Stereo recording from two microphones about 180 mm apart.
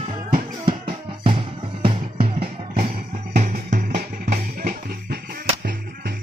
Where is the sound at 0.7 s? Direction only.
30° right (ahead or behind).